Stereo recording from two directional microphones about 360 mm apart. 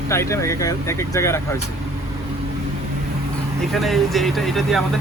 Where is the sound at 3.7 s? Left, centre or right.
Centre.